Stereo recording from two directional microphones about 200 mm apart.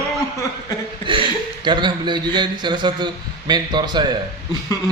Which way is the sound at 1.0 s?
25° right (ahead or behind).